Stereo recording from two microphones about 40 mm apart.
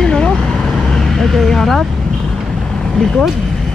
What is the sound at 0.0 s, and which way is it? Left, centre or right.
Vehicle, centre.